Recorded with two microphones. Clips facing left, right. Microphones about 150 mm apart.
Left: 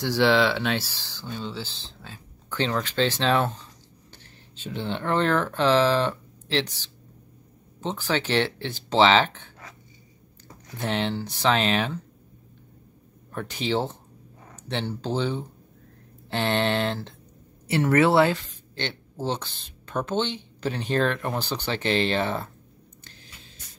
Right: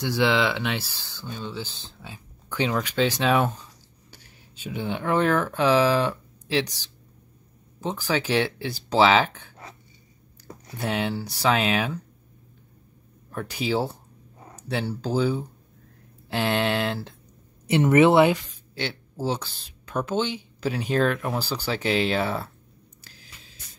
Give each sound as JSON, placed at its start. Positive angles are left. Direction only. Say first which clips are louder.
{"t": 0.0, "sound": "speech", "louder": "left 2 dB", "side_deg": -15}
{"t": 10.8, "sound": "speech", "louder": "even", "side_deg": -10}
{"t": 13.3, "sound": "speech", "louder": "right 1 dB", "side_deg": -5}
{"t": 14.4, "sound": "a sound", "louder": "right 3 dB", "side_deg": -35}
{"t": 14.7, "sound": "speech", "louder": "right 2 dB", "side_deg": -10}
{"t": 17.6, "sound": "speech", "louder": "right 3 dB", "side_deg": -20}
{"t": 23.0, "sound": "a sound", "louder": "left 1 dB", "side_deg": -5}